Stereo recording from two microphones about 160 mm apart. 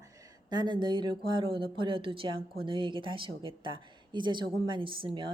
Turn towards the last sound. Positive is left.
turn(degrees=-30)  # may be behind; listen again after turning